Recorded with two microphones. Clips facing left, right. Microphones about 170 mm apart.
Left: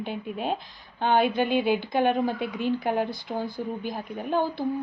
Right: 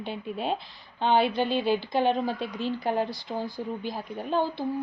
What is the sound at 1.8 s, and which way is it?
Speech, 55° left (ahead or behind).